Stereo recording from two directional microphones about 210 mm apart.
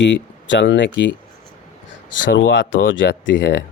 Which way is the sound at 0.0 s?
60° left (ahead or behind).